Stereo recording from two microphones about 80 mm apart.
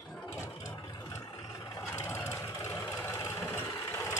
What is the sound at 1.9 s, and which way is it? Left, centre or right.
Vehicle, left.